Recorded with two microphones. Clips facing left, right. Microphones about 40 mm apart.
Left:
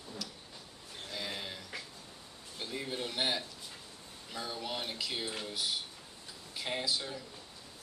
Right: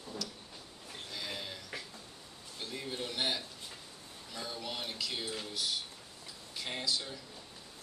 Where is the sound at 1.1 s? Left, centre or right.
Centre.